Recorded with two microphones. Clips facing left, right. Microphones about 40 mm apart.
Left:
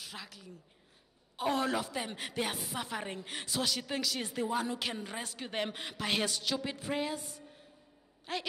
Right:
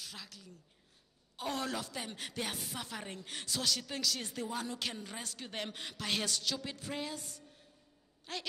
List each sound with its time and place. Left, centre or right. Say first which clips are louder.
0.0 s a woman's voice: left 3 dB; centre